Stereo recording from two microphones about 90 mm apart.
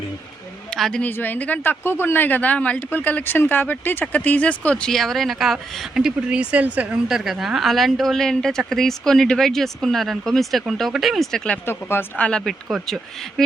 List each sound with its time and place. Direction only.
0.7 s a woman's voice: 5° left (ahead or behind)
1.0 s speech: 20° left (ahead or behind)
11.6 s speech: 25° left (ahead or behind)